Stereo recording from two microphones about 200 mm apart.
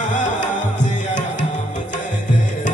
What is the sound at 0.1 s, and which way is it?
Music, 40° left (ahead or behind).